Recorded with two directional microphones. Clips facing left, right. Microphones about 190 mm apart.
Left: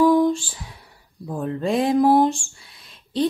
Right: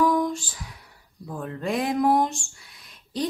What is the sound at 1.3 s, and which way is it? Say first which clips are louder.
Speech: left 5 dB; 30° left (ahead or behind).